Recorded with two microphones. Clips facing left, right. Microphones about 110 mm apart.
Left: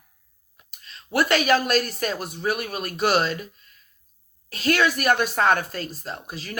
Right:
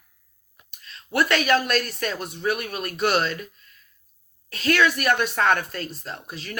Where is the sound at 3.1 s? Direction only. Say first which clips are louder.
Left 1 dB; 30° left (ahead or behind).